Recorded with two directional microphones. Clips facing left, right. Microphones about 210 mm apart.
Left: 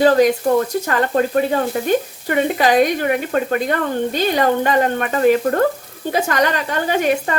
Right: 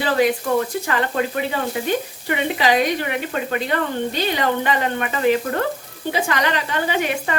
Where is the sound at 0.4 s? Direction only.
35° left (ahead or behind).